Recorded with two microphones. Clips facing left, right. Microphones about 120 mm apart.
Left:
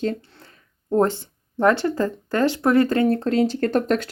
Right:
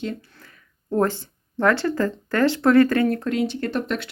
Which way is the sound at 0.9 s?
20° left (ahead or behind).